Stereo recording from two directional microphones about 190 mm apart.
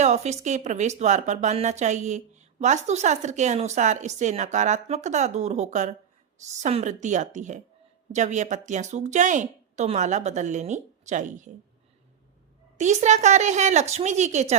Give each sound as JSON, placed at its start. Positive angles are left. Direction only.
{"t": 0.0, "sound": "speech", "side_deg": -35}
{"t": 12.7, "sound": "speech", "side_deg": -40}